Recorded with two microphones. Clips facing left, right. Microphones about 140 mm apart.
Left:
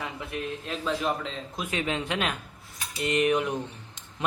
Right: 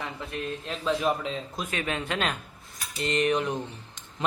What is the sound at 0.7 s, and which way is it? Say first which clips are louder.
Speech: right 2 dB; 5° right (ahead or behind).